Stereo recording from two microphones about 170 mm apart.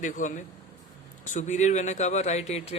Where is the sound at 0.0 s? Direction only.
45° left (ahead or behind).